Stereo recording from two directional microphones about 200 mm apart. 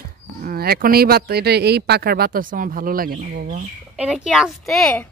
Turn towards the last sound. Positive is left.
turn(degrees=5)  # may be behind; listen again after turning